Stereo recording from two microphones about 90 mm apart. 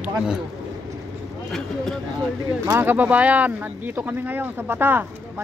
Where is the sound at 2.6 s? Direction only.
30° right (ahead or behind).